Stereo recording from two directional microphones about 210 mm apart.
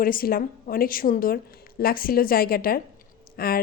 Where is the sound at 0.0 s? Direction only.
45° left (ahead or behind).